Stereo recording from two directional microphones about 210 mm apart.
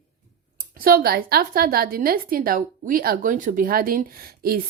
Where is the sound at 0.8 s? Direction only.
45° right (ahead or behind).